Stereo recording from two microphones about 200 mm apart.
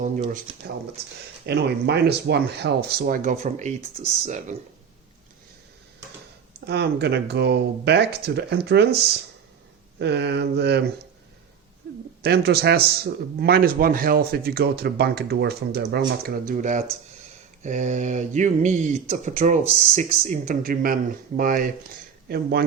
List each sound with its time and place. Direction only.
0.0 s speech: 40° right (ahead or behind)
1.5 s speech: 55° right (ahead or behind)
3.2 s speech: 35° right (ahead or behind)
6.7 s speech: 55° right (ahead or behind)
10.0 s speech: 55° right (ahead or behind)
12.2 s speech: 55° right (ahead or behind)